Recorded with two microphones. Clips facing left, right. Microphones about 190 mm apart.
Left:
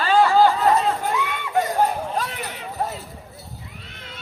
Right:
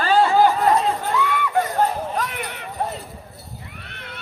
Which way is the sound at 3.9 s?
65° right (ahead or behind).